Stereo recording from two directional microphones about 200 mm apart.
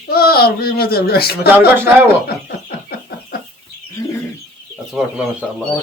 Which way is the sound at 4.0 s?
15° left (ahead or behind).